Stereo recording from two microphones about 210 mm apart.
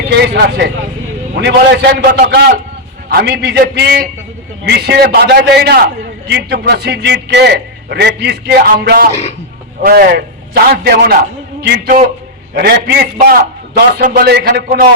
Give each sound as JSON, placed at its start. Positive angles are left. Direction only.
{"t": 0.1, "sound": "a man's voice", "side_deg": -55}